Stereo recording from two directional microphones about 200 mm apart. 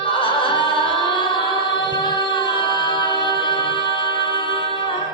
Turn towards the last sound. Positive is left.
turn(degrees=25)  # may be behind; listen again after turning